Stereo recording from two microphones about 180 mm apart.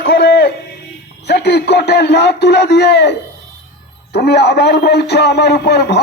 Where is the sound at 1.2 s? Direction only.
65° left (ahead or behind).